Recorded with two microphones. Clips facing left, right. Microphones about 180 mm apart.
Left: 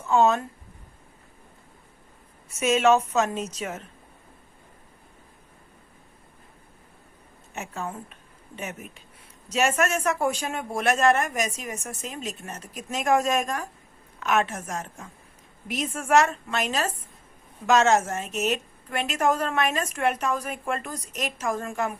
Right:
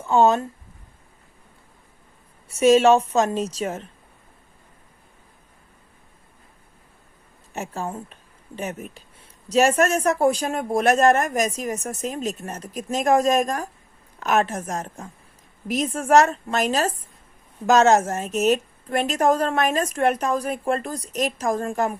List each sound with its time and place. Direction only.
0.0 s speech: 30° right (ahead or behind)
2.5 s a woman's voice: 35° right (ahead or behind)
7.5 s a woman's voice: 35° right (ahead or behind)